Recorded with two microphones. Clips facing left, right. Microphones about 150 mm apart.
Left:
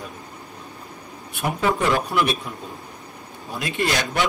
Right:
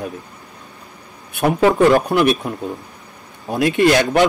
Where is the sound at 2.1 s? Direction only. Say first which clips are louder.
Right 6 dB; 55° right (ahead or behind).